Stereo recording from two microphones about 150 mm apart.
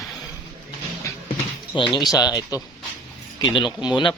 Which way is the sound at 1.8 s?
30° left (ahead or behind).